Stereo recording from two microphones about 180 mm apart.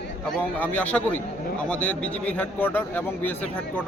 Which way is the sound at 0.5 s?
10° left (ahead or behind).